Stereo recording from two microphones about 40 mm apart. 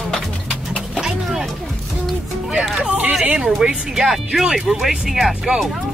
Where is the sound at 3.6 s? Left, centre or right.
Centre.